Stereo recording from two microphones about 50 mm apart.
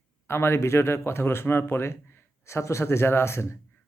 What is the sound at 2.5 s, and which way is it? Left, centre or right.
Speech, left.